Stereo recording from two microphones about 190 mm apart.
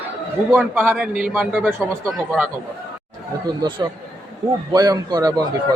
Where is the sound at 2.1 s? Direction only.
Centre (ahead or behind).